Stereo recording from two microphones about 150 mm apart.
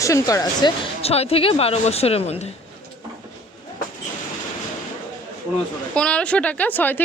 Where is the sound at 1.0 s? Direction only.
40° left (ahead or behind).